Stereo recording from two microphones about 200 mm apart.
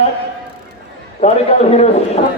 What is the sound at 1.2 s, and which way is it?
Speech, 30° left (ahead or behind).